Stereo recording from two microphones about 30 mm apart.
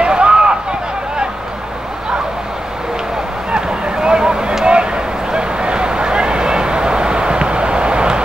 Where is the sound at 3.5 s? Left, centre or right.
Right.